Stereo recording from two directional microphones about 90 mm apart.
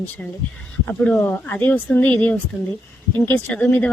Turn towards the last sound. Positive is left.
turn(degrees=15)  # may be behind; listen again after turning